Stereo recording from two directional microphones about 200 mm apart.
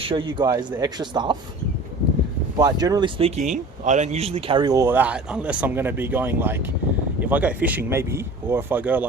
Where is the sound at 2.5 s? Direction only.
20° right (ahead or behind).